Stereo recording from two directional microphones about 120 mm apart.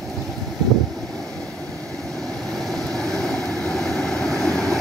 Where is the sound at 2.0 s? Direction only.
5° left (ahead or behind).